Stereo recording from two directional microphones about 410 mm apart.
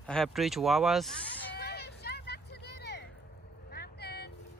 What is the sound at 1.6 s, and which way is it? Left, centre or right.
Vehicle, left.